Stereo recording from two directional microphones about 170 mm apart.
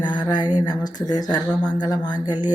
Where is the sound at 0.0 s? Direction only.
25° left (ahead or behind).